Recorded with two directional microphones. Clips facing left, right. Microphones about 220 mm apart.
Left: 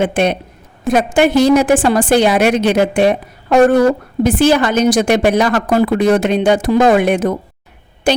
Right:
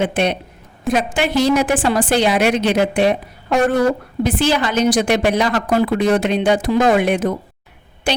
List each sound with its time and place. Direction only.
0.0 s a woman's voice: 50° left (ahead or behind)